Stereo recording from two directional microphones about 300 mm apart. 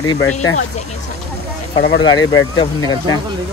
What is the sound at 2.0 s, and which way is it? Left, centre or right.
Speech, centre.